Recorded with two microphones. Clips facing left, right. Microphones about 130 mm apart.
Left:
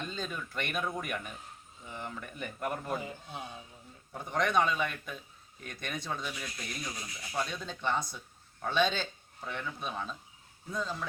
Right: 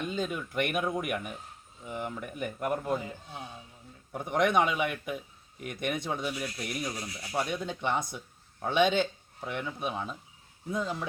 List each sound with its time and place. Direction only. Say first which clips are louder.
0.0 s speech: right 6 dB; 10° right (ahead or behind)
4.1 s speech: right 4 dB; 20° right (ahead or behind)